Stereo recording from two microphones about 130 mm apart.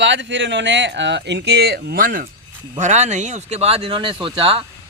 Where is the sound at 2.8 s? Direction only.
65° right (ahead or behind).